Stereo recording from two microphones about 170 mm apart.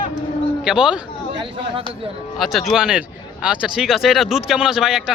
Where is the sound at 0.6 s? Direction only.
5° right (ahead or behind).